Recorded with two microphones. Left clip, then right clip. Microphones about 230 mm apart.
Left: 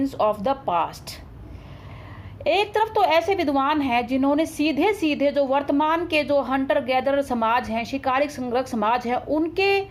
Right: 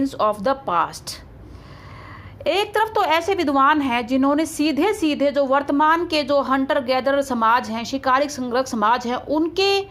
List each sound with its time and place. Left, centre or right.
0.0 s a woman's voice: centre
0.6 s a woman's voice: right
0.9 s a woman's voice: centre
2.4 s a woman's voice: centre